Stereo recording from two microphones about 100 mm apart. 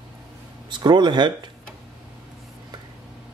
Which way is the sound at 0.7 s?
50° right (ahead or behind).